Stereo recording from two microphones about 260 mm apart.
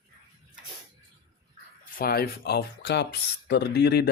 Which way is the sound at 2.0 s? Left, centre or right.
Left.